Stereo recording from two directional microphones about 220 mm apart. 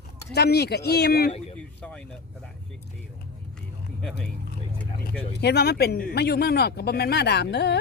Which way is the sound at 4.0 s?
5° left (ahead or behind).